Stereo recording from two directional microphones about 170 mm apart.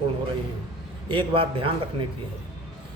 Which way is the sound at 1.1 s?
30° right (ahead or behind).